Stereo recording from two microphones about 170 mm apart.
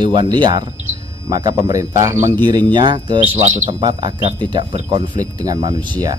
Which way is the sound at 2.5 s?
25° right (ahead or behind).